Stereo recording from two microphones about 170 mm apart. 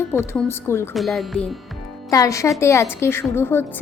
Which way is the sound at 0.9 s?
Centre (ahead or behind).